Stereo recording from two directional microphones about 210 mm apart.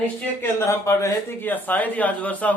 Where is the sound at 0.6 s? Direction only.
15° left (ahead or behind).